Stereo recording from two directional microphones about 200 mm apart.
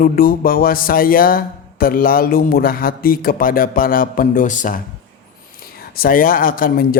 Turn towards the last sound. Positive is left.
turn(degrees=45)  # may be behind; listen again after turning